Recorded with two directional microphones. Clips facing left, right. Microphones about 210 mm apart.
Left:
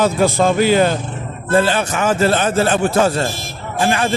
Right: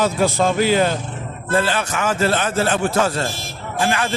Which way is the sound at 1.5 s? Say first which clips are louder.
Left 4 dB; 25° left (ahead or behind).